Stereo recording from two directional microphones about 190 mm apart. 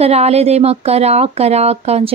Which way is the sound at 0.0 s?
35° right (ahead or behind).